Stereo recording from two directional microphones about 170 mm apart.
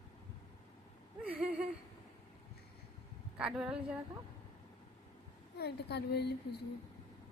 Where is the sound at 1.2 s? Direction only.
5° right (ahead or behind).